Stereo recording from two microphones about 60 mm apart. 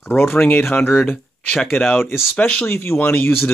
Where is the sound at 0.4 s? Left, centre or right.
Left.